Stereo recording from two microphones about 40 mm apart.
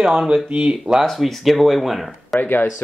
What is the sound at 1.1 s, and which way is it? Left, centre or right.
Speech, centre.